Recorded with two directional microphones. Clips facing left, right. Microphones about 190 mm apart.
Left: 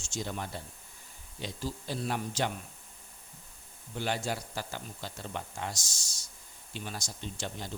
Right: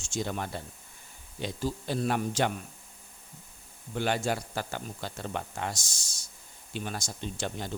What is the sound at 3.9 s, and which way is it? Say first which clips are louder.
A man's voice: right 4 dB; 60° right (ahead or behind).